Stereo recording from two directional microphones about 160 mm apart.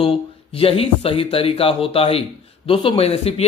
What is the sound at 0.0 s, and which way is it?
A man's voice, 35° left (ahead or behind).